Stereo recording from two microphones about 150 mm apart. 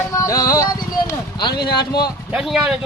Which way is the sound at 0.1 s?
20° left (ahead or behind).